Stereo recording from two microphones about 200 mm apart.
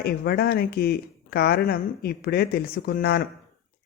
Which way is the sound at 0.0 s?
50° left (ahead or behind).